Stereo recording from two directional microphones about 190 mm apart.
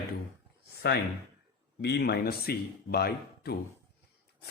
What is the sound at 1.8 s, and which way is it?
Speech, 60° left (ahead or behind).